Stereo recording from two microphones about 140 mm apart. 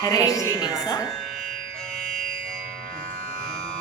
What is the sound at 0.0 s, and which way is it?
Music, 25° left (ahead or behind).